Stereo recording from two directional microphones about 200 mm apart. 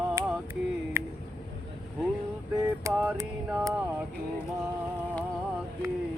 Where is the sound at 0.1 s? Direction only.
10° right (ahead or behind).